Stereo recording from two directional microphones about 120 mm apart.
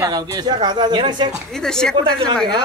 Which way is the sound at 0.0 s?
35° right (ahead or behind).